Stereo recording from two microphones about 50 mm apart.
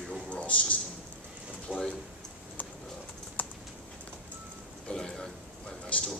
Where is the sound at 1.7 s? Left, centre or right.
Centre.